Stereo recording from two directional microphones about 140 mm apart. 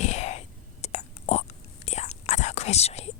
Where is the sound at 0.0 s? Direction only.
55° left (ahead or behind).